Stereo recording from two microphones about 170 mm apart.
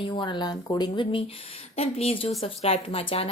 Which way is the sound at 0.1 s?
25° left (ahead or behind).